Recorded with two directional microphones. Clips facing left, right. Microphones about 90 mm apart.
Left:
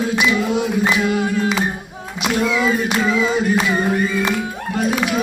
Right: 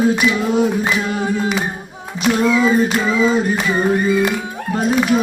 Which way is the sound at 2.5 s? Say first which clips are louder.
Right 3 dB; 35° right (ahead or behind).